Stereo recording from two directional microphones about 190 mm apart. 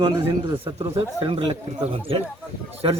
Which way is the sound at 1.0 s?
30° right (ahead or behind).